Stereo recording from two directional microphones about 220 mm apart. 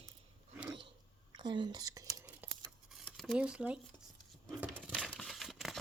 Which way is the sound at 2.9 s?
Centre (ahead or behind).